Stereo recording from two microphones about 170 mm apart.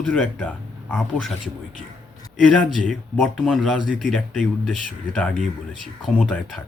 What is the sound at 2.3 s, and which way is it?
Speech, centre (ahead or behind).